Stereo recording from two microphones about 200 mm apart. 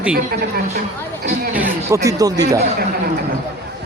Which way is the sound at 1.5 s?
10° right (ahead or behind).